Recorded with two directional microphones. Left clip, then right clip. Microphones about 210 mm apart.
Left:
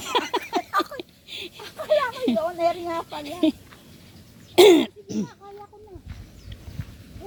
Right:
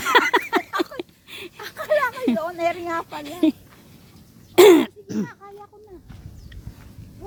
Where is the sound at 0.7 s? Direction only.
50° right (ahead or behind).